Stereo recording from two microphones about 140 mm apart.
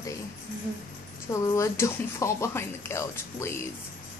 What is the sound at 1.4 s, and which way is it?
Speech, 20° left (ahead or behind).